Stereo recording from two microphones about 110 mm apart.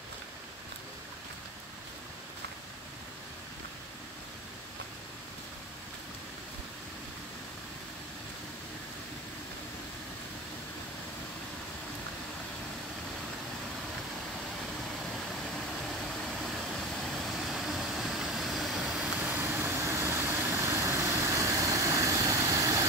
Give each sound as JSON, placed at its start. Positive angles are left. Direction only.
{"t": 15.0, "sound": "vehicle", "side_deg": 5}